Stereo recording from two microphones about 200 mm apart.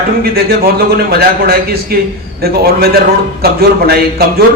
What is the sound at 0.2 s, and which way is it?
A man's voice, 50° right (ahead or behind).